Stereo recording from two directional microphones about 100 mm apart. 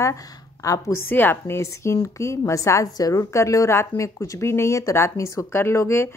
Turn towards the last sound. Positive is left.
turn(degrees=25)  # may be behind; listen again after turning